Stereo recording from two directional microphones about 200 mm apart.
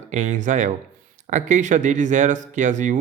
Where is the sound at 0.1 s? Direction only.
35° right (ahead or behind).